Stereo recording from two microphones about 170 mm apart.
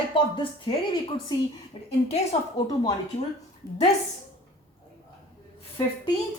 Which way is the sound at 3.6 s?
20° left (ahead or behind).